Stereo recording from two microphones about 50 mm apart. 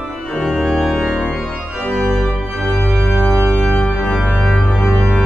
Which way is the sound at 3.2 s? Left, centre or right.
Left.